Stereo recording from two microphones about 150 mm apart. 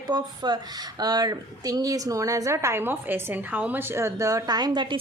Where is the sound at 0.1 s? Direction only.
30° right (ahead or behind).